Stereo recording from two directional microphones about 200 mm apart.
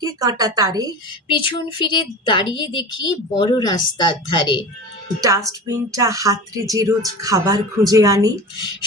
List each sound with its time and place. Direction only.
0.0 s a woman's voice: 20° right (ahead or behind)
1.3 s a woman's voice: 25° left (ahead or behind)
5.2 s speech: 15° right (ahead or behind)